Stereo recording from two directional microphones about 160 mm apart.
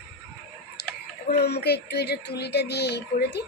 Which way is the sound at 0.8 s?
80° left.